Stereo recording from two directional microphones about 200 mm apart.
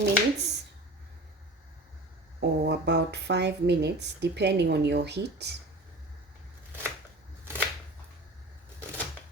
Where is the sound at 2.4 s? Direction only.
60° right (ahead or behind).